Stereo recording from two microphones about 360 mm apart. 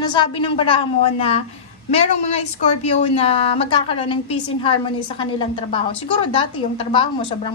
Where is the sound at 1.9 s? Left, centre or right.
Centre.